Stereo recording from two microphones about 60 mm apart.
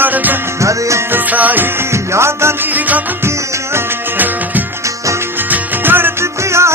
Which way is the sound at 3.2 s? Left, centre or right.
Right.